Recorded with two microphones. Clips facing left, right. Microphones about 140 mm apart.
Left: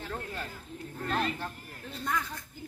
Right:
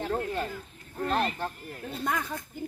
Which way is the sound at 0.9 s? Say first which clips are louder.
Right 4 dB; 40° right (ahead or behind).